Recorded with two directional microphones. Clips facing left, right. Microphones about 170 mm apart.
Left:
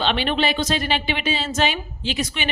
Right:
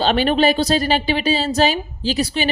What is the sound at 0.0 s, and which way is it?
Speech, 40° right (ahead or behind).